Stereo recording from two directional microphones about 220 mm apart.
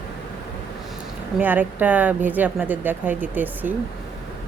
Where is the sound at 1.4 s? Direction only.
10° right (ahead or behind).